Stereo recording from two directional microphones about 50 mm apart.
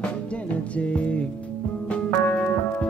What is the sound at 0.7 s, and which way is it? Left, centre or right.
Music, left.